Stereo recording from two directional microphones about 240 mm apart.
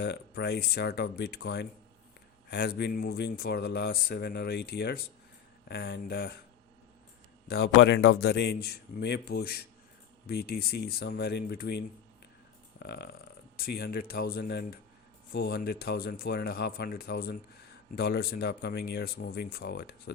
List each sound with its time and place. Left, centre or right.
0.0 s speech: left
7.4 s speech: left